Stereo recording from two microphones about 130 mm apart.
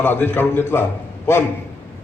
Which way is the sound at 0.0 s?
15° left (ahead or behind).